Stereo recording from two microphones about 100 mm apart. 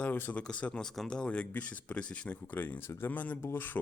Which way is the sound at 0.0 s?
20° left (ahead or behind).